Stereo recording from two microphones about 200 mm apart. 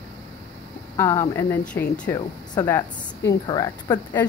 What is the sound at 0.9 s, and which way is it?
Speech, 15° left (ahead or behind).